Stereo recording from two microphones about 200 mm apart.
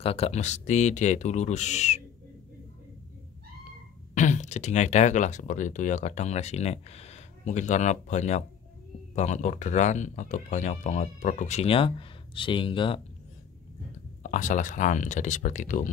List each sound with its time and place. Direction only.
0.0 s speech: 30° left (ahead or behind)
4.1 s speech: 35° left (ahead or behind)
14.2 s speech: 40° left (ahead or behind)